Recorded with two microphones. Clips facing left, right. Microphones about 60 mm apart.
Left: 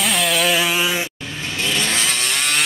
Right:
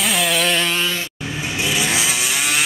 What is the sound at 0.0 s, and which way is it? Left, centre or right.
Chainsaw, centre.